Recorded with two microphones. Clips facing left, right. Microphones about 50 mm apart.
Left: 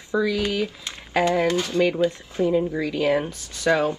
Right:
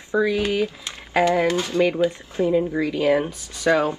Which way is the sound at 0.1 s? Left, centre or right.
Right.